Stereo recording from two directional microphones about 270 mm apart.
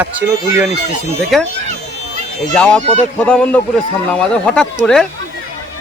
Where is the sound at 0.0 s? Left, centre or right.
Centre.